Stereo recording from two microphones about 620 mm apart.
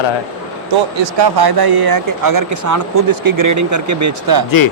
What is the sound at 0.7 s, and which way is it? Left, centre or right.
Speech, right.